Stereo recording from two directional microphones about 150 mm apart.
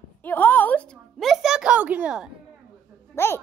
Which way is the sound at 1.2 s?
Centre (ahead or behind).